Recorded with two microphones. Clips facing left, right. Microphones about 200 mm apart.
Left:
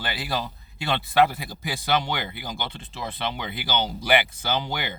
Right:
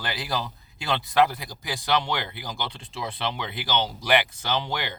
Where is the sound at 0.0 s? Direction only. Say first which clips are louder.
Left 1 dB; 5° left (ahead or behind).